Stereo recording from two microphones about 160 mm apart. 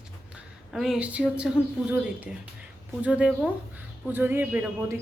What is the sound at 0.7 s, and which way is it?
Speech, 5° right (ahead or behind).